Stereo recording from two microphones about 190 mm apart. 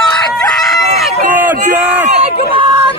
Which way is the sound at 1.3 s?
10° right (ahead or behind).